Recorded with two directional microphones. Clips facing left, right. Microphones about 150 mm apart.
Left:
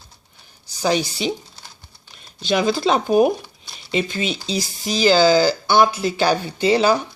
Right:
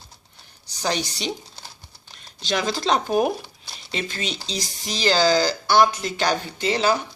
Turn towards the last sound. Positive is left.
turn(degrees=15)  # may be behind; listen again after turning